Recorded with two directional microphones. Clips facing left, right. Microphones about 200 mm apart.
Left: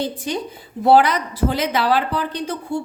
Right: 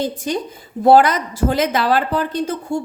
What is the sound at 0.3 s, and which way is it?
Speech, 45° right (ahead or behind).